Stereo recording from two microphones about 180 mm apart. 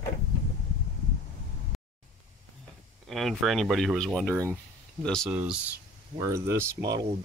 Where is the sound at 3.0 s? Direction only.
Centre (ahead or behind).